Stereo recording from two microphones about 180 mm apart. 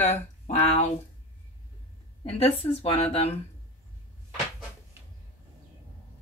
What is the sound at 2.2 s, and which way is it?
A woman's voice, 35° left (ahead or behind).